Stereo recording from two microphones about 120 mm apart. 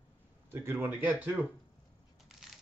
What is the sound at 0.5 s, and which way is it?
Speech, 20° right (ahead or behind).